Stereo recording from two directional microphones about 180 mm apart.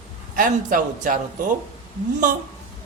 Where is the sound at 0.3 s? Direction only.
45° right (ahead or behind).